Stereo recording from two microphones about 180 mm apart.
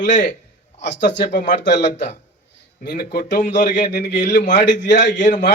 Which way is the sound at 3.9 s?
75° left (ahead or behind).